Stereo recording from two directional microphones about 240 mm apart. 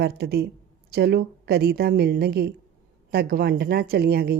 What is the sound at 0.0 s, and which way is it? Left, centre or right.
A woman's voice, right.